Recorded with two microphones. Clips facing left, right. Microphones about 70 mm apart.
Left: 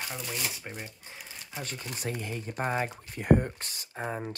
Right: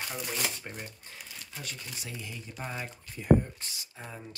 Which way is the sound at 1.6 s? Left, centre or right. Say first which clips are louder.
Left 8 dB; left.